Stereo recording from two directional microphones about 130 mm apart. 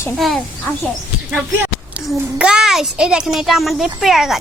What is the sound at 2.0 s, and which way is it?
A child's voice, 5° right (ahead or behind).